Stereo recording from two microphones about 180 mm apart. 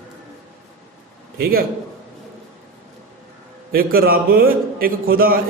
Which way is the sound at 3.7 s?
55° right (ahead or behind).